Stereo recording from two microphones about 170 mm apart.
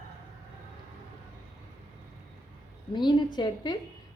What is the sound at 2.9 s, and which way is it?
Speech, 25° left (ahead or behind).